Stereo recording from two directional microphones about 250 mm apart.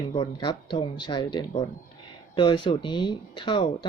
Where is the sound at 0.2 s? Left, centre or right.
Centre.